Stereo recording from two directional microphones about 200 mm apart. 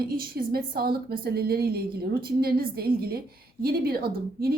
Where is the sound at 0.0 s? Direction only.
50° right (ahead or behind).